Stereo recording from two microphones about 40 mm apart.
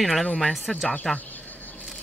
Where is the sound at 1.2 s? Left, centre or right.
Left.